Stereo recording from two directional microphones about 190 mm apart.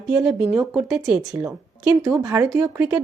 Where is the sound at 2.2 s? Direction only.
20° right (ahead or behind).